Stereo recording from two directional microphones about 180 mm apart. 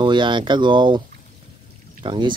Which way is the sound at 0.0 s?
25° right (ahead or behind).